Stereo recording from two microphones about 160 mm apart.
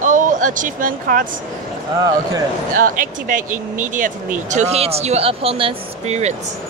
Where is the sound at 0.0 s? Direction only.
55° right (ahead or behind).